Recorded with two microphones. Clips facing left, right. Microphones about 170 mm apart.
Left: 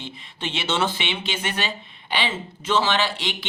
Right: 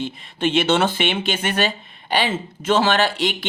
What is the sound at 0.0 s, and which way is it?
Speech, 50° right (ahead or behind).